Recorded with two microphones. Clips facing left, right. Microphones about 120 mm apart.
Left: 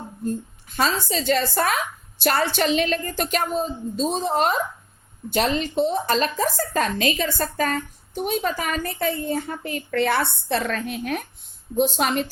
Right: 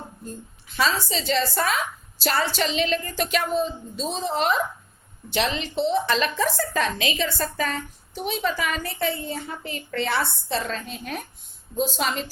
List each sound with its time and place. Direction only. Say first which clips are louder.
0.3 s a woman's voice: left 10 dB; 45° left (ahead or behind)